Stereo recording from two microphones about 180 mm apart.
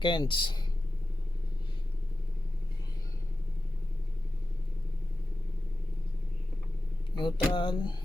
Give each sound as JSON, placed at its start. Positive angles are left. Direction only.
{"t": 0.0, "sound": "speech", "side_deg": 25}
{"t": 7.2, "sound": "speech", "side_deg": 30}